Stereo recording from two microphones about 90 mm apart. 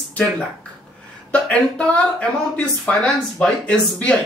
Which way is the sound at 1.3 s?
15° left (ahead or behind).